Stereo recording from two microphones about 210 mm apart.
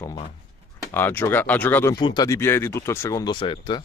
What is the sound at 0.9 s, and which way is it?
Speech, 10° left (ahead or behind).